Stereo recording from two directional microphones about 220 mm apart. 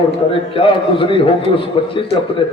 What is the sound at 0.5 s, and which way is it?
A man's voice, 25° left (ahead or behind).